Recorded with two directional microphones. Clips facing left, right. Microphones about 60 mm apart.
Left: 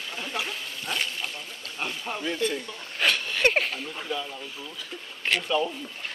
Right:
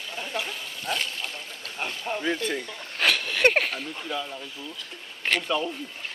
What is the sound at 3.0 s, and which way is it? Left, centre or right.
Speech, right.